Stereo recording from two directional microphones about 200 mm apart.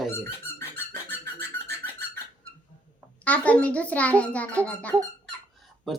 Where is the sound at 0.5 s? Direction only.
10° left (ahead or behind).